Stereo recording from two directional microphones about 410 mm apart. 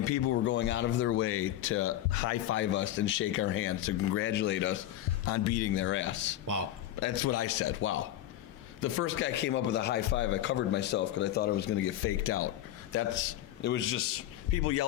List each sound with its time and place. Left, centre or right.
0.0 s a man's voice: left
2.6 s a man's voice: left
5.2 s a man's voice: left